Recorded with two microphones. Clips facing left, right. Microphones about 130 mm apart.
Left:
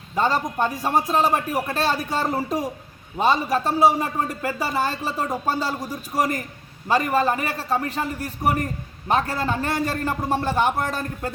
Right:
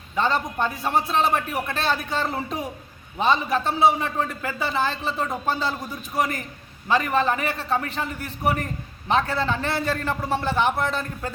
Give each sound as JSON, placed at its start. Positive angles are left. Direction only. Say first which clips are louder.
{"t": 0.2, "sound": "a man's voice", "louder": "left 2 dB", "side_deg": 40}